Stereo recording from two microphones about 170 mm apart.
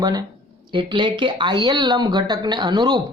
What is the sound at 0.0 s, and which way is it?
A woman's voice, 25° right (ahead or behind).